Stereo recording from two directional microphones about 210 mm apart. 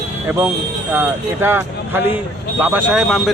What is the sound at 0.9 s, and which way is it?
A man's voice, 10° right (ahead or behind).